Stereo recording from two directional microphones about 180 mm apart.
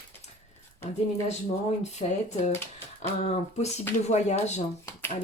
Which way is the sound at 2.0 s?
40° left (ahead or behind).